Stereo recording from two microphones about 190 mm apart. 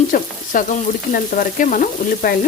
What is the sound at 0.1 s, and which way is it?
Frying, 45° left (ahead or behind).